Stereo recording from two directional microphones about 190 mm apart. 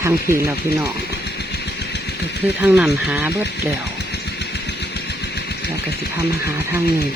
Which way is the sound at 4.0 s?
60° left (ahead or behind).